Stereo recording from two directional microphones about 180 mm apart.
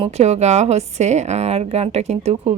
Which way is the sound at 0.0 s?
35° right (ahead or behind).